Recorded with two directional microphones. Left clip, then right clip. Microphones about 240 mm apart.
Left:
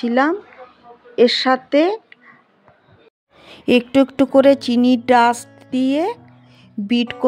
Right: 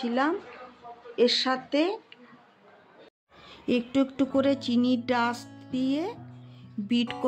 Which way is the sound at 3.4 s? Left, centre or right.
Left.